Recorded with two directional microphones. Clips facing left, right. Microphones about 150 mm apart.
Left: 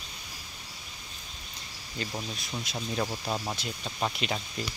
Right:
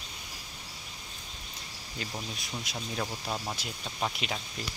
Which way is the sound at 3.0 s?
5° left (ahead or behind).